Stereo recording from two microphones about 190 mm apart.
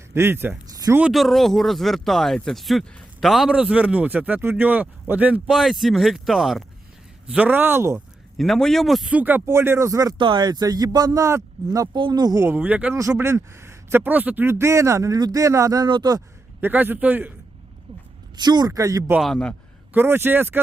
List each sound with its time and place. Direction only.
0.1 s speech: 15° right (ahead or behind)
1.0 s speech: centre (ahead or behind)
8.4 s speech: centre (ahead or behind); by 16.2 s 20° right (ahead or behind)
16.6 s speech: 10° right (ahead or behind)
18.3 s speech: 20° right (ahead or behind)
19.2 s speech: 5° left (ahead or behind)
19.9 s speech: 10° right (ahead or behind)